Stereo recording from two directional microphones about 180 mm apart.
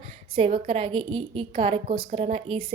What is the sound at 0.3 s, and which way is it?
A woman's voice, 30° right (ahead or behind).